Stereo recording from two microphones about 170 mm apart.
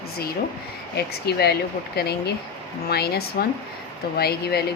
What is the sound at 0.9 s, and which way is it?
Speech, 70° left (ahead or behind).